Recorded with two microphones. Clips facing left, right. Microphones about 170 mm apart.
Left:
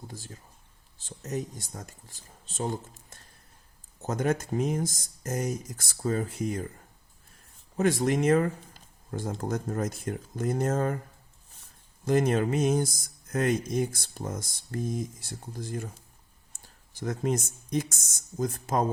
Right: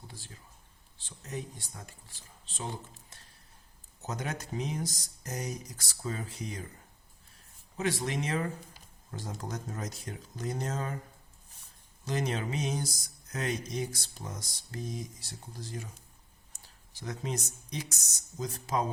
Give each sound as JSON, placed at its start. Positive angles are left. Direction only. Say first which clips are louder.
{"t": 0.1, "sound": "speech", "louder": "left 7 dB", "side_deg": 45}
{"t": 7.8, "sound": "speech", "louder": "left 8 dB", "side_deg": 50}
{"t": 12.0, "sound": "speech", "louder": "left 9 dB", "side_deg": 50}